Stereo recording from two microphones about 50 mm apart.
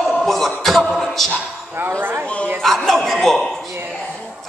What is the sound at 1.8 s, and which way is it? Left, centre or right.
Speech, right.